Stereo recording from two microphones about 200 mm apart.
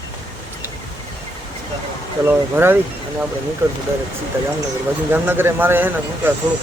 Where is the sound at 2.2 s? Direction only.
10° right (ahead or behind).